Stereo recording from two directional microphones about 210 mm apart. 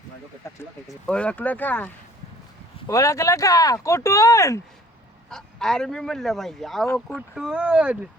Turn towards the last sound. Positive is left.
turn(degrees=-5)  # may be behind; listen again after turning